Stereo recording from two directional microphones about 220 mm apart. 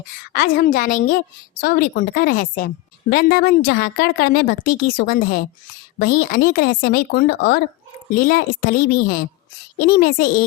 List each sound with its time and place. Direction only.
0.3 s a woman's voice: 40° left (ahead or behind)